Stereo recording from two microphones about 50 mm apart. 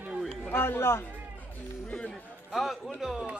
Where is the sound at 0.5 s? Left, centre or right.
Left.